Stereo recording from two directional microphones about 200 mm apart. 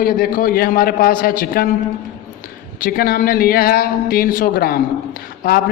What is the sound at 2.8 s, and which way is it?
A man's voice, 50° left (ahead or behind).